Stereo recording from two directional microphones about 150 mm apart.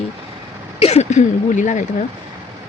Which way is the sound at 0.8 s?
45° left (ahead or behind).